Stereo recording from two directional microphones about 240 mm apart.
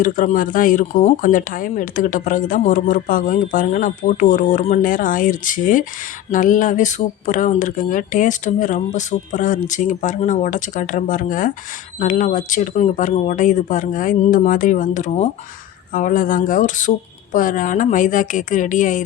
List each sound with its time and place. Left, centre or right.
0.0 s speech: left